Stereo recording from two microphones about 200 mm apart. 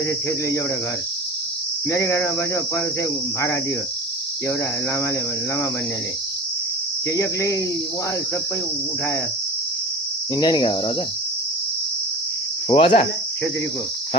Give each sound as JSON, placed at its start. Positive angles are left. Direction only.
{"t": 1.9, "sound": "speech", "side_deg": 15}
{"t": 7.1, "sound": "speech", "side_deg": 15}
{"t": 10.3, "sound": "cricket", "side_deg": 20}
{"t": 12.6, "sound": "cricket", "side_deg": 30}